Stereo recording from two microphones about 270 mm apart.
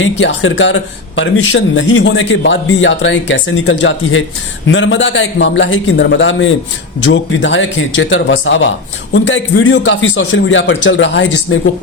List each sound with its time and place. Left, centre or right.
0.0 s speech: left